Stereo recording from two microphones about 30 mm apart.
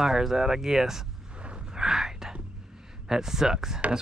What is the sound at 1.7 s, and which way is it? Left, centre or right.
Whispering, centre.